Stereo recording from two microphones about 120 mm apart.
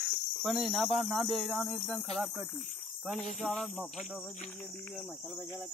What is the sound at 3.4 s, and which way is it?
Speech, centre (ahead or behind).